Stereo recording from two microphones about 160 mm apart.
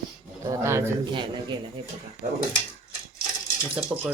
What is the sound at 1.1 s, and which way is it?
A man's voice, 30° right (ahead or behind).